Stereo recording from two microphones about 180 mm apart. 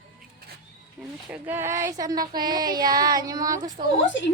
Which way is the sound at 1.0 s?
Centre (ahead or behind).